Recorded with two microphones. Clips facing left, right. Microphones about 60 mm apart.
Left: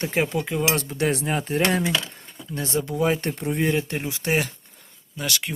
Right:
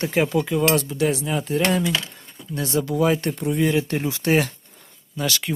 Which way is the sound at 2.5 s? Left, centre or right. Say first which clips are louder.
Right 3 dB; left.